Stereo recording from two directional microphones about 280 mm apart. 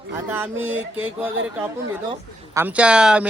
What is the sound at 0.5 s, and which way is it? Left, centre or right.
Music, right.